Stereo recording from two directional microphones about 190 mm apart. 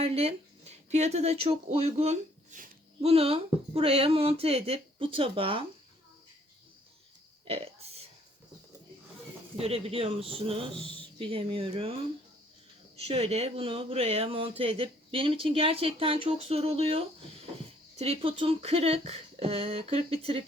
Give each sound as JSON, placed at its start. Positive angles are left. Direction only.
{"t": 0.0, "sound": "speech", "side_deg": -30}
{"t": 7.4, "sound": "burping", "side_deg": -30}
{"t": 9.6, "sound": "speech", "side_deg": -30}